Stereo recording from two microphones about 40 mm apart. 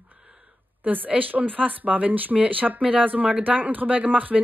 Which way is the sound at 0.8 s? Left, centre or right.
Right.